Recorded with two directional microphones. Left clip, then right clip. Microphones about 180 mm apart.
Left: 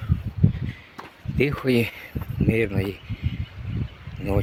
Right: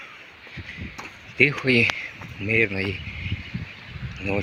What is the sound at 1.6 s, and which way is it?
Speech, 20° left (ahead or behind).